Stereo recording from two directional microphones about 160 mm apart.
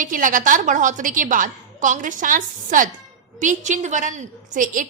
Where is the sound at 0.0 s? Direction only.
55° right (ahead or behind).